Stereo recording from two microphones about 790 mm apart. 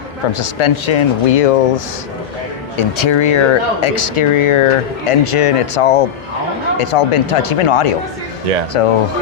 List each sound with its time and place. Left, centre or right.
0.3 s speech: left
2.7 s speech: left